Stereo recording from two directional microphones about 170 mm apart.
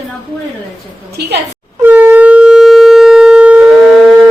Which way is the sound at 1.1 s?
75° right (ahead or behind).